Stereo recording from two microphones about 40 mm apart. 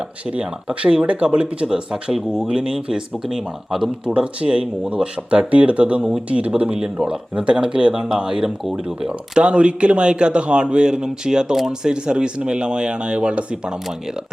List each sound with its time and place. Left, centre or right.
0.3 s speech: right
1.4 s speech: right
4.0 s speech: right
6.0 s speech: centre
6.3 s speech: right
6.7 s speech: centre